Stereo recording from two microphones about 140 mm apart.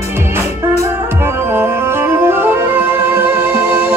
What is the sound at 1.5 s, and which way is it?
Music, 15° right (ahead or behind).